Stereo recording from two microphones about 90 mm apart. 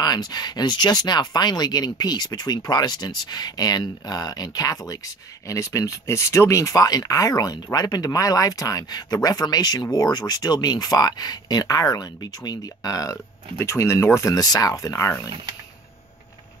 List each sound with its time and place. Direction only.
0.0 s speech: 50° left (ahead or behind); by 15.2 s 30° left (ahead or behind)